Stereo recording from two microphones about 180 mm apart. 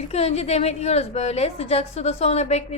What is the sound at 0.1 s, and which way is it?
A woman's voice, 35° left (ahead or behind).